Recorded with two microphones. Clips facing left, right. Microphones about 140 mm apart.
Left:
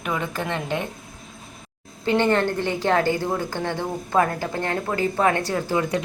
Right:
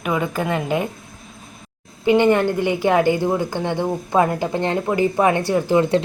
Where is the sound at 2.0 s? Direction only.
15° right (ahead or behind).